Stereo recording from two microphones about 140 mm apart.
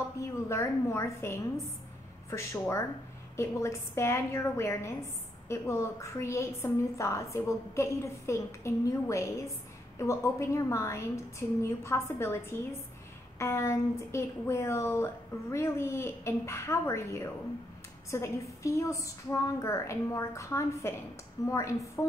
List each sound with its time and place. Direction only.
0.5 s a woman's voice: 20° left (ahead or behind)